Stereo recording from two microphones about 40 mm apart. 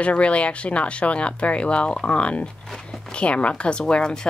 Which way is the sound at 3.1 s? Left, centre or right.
Left.